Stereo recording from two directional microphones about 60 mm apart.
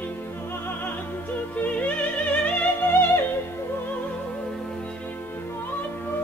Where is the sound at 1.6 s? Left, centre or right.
Left.